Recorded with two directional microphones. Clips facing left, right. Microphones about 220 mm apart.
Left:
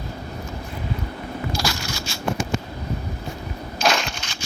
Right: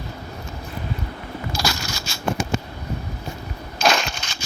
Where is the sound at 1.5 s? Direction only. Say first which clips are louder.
Even; 40° right (ahead or behind).